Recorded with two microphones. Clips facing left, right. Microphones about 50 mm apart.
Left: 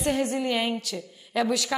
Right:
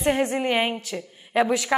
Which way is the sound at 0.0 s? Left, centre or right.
Right.